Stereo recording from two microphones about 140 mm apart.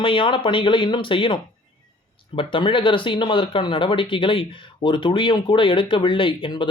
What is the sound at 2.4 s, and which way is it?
A man's voice, 40° left (ahead or behind).